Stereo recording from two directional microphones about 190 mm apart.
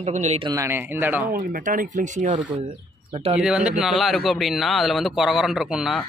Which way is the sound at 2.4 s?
25° right (ahead or behind).